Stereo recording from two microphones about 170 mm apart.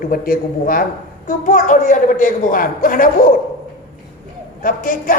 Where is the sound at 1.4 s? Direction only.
50° left (ahead or behind).